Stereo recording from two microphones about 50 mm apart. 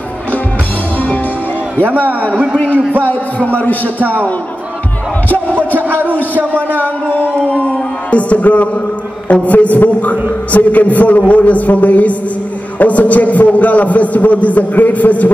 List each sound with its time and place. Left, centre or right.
0.9 s music: left
1.9 s a man's voice: right
2.3 s a man's voice: centre
3.1 s a man's voice: left
5.8 s a sound: right
7.4 s music: left
9.3 s a man's voice: left